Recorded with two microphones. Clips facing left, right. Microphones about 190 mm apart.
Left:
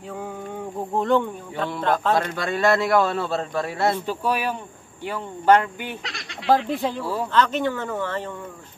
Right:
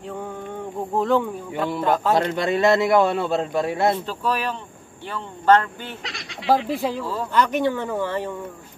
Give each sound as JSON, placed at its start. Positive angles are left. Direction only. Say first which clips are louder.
{"t": 0.9, "sound": "speech", "louder": "even", "side_deg": 0}
{"t": 2.1, "sound": "a man's voice", "louder": "right 3 dB", "side_deg": -25}
{"t": 4.0, "sound": "speech", "louder": "left 1 dB", "side_deg": 10}
{"t": 6.0, "sound": "speech", "louder": "even", "side_deg": 0}
{"t": 7.0, "sound": "speech", "louder": "left 1 dB", "side_deg": 10}
{"t": 7.3, "sound": "speech", "louder": "right 2 dB", "side_deg": -10}